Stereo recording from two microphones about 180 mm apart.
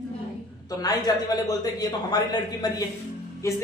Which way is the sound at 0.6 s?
20° left (ahead or behind).